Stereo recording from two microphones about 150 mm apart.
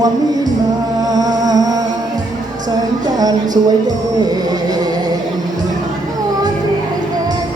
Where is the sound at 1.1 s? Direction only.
25° right (ahead or behind).